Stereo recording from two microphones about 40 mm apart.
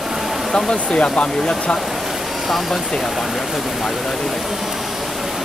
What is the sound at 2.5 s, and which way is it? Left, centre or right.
Speech, centre.